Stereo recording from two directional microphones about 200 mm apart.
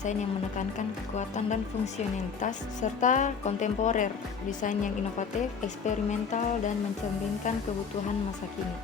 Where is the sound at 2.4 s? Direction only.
40° left (ahead or behind).